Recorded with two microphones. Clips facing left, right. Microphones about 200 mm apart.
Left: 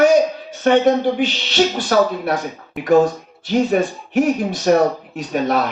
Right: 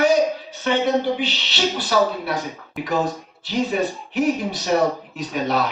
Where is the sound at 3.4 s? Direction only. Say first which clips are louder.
Left 5 dB; 50° left (ahead or behind).